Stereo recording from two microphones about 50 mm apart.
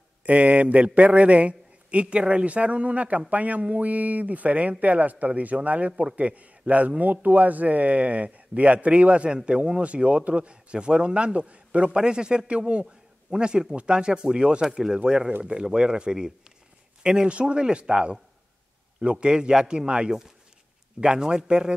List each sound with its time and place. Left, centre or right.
0.2 s a man's voice: right